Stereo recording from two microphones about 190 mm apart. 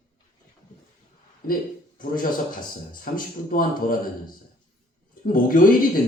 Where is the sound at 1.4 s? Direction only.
50° left (ahead or behind).